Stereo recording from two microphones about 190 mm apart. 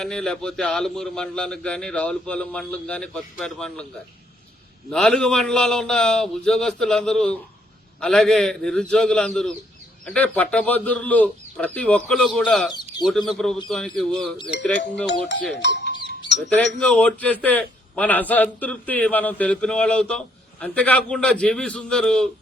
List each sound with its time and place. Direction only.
0.0 s a man's voice: 5° left (ahead or behind)
4.9 s a man's voice: centre (ahead or behind)
15.5 s speech: 65° left (ahead or behind)
16.6 s a man's voice: 5° left (ahead or behind)